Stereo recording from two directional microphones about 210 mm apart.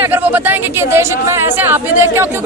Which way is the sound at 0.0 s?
10° right (ahead or behind).